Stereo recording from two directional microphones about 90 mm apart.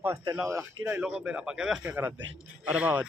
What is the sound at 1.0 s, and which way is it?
Speech, 10° right (ahead or behind).